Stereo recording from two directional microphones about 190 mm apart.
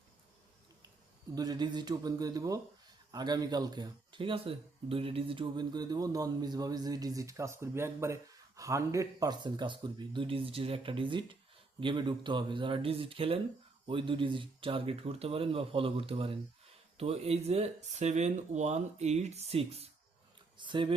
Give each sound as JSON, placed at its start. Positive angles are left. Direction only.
{"t": 1.4, "sound": "speech", "side_deg": -20}